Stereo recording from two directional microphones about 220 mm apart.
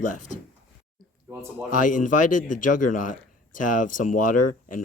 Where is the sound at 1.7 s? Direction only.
35° left (ahead or behind).